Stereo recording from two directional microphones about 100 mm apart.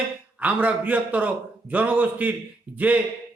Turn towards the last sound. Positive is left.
turn(degrees=-15)  # may be behind; listen again after turning